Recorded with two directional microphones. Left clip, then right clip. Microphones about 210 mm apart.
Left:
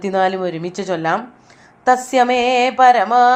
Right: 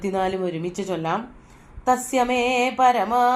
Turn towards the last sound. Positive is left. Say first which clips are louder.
# left 7 dB
turn(degrees=20)  # may be behind; listen again after turning